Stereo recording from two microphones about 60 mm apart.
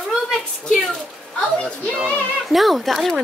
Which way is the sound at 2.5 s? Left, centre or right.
Centre.